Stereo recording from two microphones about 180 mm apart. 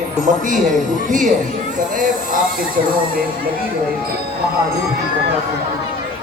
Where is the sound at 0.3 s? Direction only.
45° right (ahead or behind).